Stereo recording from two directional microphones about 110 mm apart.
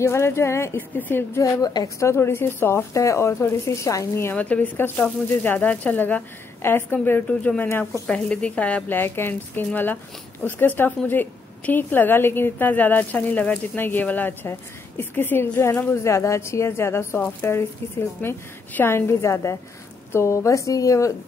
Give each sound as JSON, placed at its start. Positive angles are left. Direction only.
{"t": 0.0, "sound": "a woman's voice", "side_deg": 25}
{"t": 1.4, "sound": "a woman's voice", "side_deg": 35}
{"t": 4.3, "sound": "a woman's voice", "side_deg": 15}